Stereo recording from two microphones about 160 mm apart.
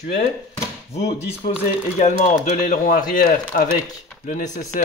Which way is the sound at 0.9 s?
40° left (ahead or behind).